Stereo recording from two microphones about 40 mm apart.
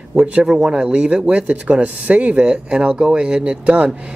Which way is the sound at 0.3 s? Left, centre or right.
Right.